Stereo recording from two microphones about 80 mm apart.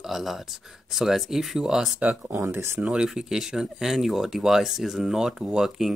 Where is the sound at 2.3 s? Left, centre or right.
Right.